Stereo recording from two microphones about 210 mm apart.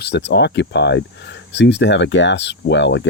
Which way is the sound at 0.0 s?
55° left (ahead or behind).